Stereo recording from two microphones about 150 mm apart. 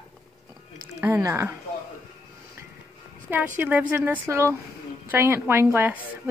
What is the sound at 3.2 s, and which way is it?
Speech, 15° right (ahead or behind).